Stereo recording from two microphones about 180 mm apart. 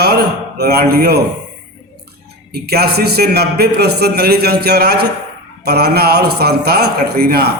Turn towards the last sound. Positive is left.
turn(degrees=-60)  # may be behind; listen again after turning